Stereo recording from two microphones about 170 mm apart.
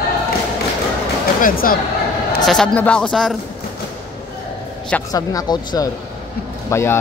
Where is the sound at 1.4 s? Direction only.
60° left (ahead or behind).